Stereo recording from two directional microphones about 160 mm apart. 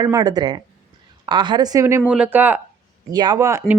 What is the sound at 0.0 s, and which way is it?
Speech, 20° right (ahead or behind).